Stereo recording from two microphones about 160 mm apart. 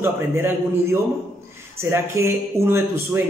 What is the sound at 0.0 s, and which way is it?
Speech, 15° right (ahead or behind).